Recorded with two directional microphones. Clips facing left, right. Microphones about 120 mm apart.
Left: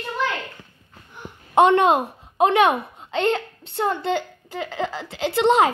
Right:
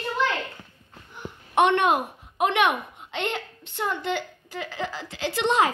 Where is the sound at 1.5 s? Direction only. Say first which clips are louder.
Left 5 dB; 30° left (ahead or behind).